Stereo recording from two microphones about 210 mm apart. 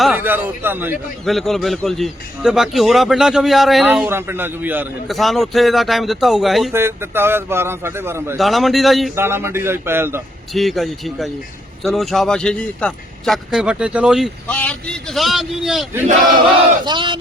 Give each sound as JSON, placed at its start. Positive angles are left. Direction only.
{"t": 0.0, "sound": "a man's voice", "side_deg": -5}
{"t": 1.2, "sound": "a man's voice", "side_deg": 0}
{"t": 6.7, "sound": "a man's voice", "side_deg": -10}
{"t": 8.4, "sound": "a man's voice", "side_deg": 0}
{"t": 9.1, "sound": "a man's voice", "side_deg": -10}
{"t": 10.5, "sound": "a man's voice", "side_deg": 0}
{"t": 16.4, "sound": "battle cry", "side_deg": -20}